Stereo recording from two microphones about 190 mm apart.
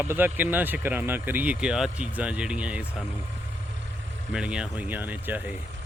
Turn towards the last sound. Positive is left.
turn(degrees=-10)  # may be behind; listen again after turning